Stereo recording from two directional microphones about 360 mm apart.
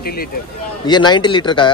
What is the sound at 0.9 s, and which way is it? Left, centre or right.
Speech, centre.